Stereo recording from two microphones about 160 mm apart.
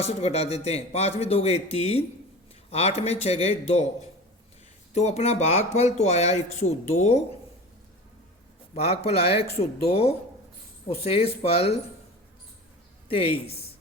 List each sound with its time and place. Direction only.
0.0 s a man's voice: 40° left (ahead or behind)
4.9 s speech: 40° left (ahead or behind)
8.7 s a man's voice: 40° left (ahead or behind)
13.1 s a man's voice: 35° left (ahead or behind)